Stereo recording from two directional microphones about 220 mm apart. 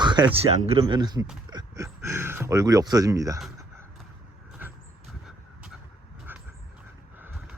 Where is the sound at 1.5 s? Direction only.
15° right (ahead or behind).